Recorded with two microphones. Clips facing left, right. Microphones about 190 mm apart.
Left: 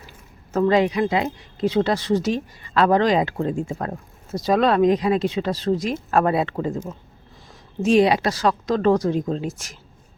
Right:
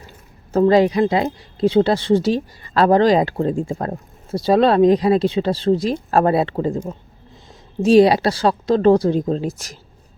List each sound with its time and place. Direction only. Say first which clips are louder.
0.5 s speech: right 4 dB; 35° right (ahead or behind)